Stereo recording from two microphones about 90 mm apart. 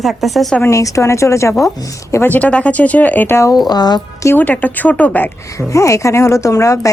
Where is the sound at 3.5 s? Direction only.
50° left (ahead or behind).